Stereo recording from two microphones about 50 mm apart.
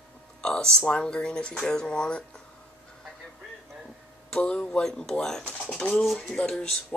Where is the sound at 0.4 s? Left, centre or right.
Centre.